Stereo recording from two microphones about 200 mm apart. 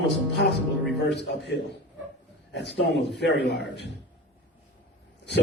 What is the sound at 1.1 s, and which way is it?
A man's voice, 55° left (ahead or behind).